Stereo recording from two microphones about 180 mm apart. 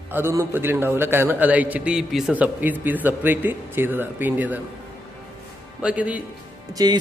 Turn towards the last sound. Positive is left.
turn(degrees=-20)  # may be behind; listen again after turning